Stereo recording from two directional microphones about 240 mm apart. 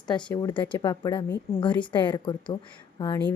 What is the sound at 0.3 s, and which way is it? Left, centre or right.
Speech, centre.